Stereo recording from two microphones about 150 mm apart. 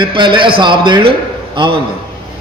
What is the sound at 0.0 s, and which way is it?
Speech, 30° right (ahead or behind).